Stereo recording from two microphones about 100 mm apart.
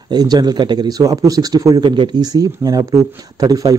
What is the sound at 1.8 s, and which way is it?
Speech, 55° right (ahead or behind).